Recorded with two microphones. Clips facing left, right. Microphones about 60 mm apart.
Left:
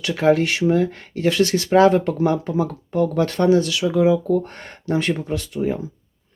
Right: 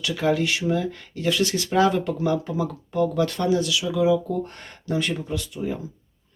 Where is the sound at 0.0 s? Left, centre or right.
Left.